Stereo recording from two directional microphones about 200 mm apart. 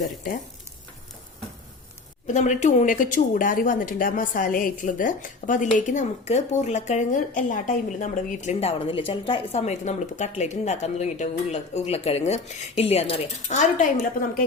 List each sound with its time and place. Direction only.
2.2 s speech: 35° left (ahead or behind)